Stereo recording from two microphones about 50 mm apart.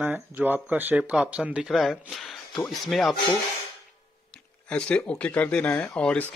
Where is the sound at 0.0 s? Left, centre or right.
Right.